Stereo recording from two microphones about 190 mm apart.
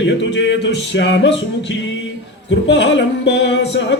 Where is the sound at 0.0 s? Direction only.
70° left (ahead or behind).